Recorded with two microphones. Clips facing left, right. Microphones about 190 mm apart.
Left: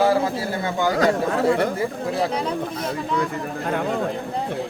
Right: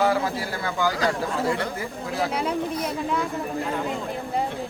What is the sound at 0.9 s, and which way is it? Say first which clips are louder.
Speech: left 5 dB; 60° left (ahead or behind).